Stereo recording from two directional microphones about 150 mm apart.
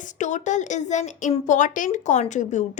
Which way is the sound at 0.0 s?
55° left (ahead or behind).